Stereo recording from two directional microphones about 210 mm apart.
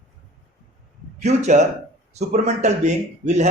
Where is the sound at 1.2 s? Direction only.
35° right (ahead or behind).